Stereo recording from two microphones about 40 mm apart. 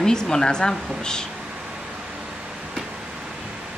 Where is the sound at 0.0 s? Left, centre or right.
Centre.